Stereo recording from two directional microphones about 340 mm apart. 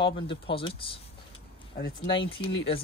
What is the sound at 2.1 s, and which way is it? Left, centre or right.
Speech, centre.